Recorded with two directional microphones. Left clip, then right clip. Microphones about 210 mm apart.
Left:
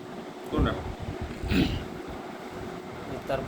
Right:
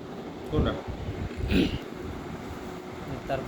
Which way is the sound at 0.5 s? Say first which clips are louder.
Even; 45° left (ahead or behind).